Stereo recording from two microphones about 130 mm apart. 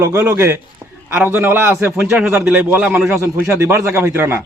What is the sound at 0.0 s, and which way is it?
A man's voice, 15° right (ahead or behind).